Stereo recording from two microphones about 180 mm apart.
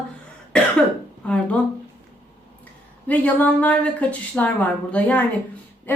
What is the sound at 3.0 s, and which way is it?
A woman's voice, 10° left (ahead or behind).